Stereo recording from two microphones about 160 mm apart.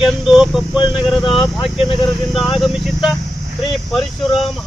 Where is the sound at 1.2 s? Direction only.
30° left (ahead or behind).